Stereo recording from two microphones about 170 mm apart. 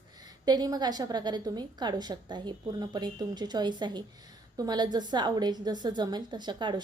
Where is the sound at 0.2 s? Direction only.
25° right (ahead or behind).